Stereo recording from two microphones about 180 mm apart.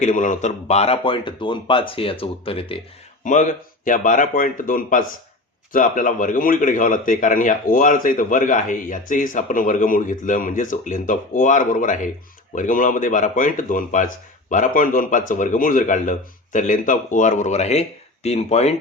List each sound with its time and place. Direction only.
0.0 s speech: 45° left (ahead or behind)
3.8 s speech: 50° left (ahead or behind)